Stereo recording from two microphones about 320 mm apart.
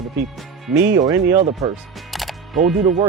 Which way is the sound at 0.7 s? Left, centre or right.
Right.